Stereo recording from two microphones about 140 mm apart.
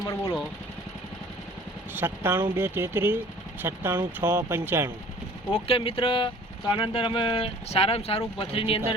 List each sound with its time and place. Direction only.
0.0 s speech: 20° left (ahead or behind)
2.0 s speech: 15° right (ahead or behind)
5.6 s speech: 40° left (ahead or behind)